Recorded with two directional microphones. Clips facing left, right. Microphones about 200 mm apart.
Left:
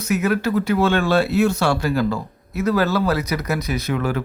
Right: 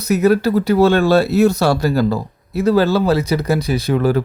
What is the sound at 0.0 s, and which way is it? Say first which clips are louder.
Speech: right 6 dB; 35° right (ahead or behind).